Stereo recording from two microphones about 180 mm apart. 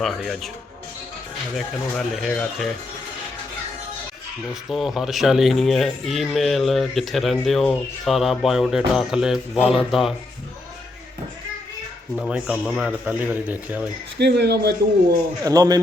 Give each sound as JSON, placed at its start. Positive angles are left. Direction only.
{"t": 0.0, "sound": "speech", "side_deg": 0}
{"t": 1.5, "sound": "speech", "side_deg": 5}
{"t": 4.7, "sound": "speech", "side_deg": 0}
{"t": 12.1, "sound": "a man's voice", "side_deg": 0}
{"t": 14.2, "sound": "speech", "side_deg": -70}
{"t": 15.4, "sound": "a man's voice", "side_deg": -20}